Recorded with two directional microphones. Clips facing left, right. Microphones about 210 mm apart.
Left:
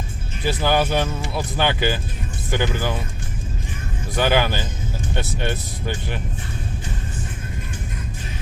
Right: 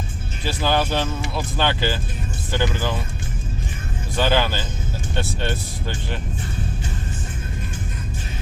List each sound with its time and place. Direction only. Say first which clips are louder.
0.4 s speech: left 2 dB; 15° left (ahead or behind)
4.2 s speech: left 1 dB; 15° left (ahead or behind)